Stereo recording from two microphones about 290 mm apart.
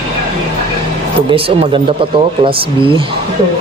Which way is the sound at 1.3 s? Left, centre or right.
Centre.